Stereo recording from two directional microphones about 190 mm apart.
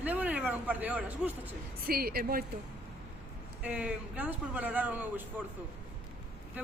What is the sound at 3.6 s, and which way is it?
Speech, 5° right (ahead or behind).